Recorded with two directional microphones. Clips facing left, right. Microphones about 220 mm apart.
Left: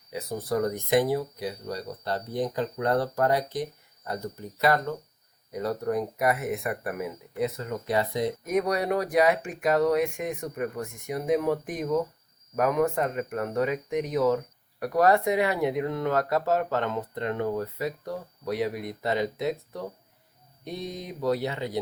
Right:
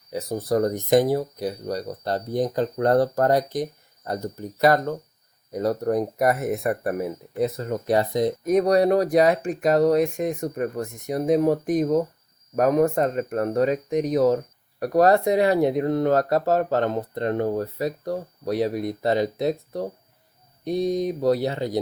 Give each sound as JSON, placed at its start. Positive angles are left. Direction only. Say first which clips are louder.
{"t": 0.1, "sound": "speech", "louder": "right 5 dB", "side_deg": -40}